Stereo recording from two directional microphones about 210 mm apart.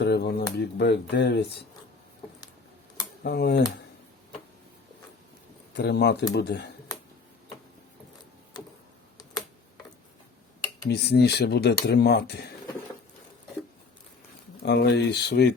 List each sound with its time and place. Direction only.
0.0 s a sound: 50° left (ahead or behind)
0.5 s speech: 50° left (ahead or behind)
3.2 s speech: 50° left (ahead or behind)
5.7 s speech: 50° left (ahead or behind)
10.8 s speech: 50° left (ahead or behind)
14.6 s speech: 50° left (ahead or behind)